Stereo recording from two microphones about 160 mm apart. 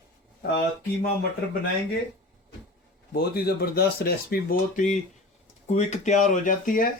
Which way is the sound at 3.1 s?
70° left (ahead or behind).